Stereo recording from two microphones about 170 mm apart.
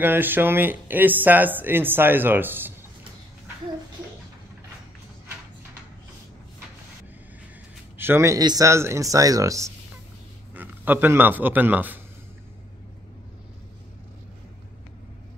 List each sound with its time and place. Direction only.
0.0 s speech: 10° right (ahead or behind)
8.0 s a man's voice: 15° right (ahead or behind)